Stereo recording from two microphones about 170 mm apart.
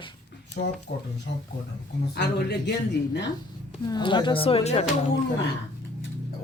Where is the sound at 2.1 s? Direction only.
80° left.